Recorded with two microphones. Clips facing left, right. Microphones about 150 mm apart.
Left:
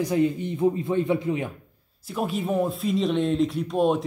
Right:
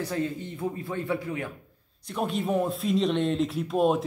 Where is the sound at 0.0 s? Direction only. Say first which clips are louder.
Left 7 dB; 15° left (ahead or behind).